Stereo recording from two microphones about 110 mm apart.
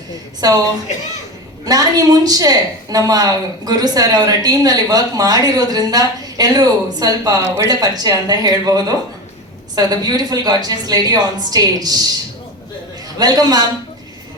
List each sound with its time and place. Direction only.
0.4 s a woman's voice: 35° right (ahead or behind)
13.1 s a woman's voice: 40° right (ahead or behind)